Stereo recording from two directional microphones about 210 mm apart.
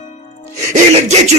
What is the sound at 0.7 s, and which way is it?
Speech, 35° right (ahead or behind).